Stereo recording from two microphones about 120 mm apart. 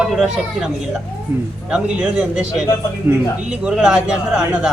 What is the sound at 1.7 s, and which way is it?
Speech, 5° right (ahead or behind).